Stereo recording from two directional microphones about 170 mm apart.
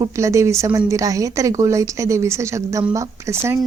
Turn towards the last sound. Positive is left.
turn(degrees=-15)  # may be behind; listen again after turning